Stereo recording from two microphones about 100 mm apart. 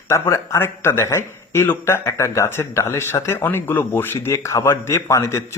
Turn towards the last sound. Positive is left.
turn(degrees=30)  # may be behind; listen again after turning